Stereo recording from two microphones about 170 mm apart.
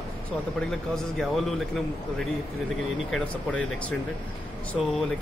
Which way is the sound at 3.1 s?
5° left (ahead or behind).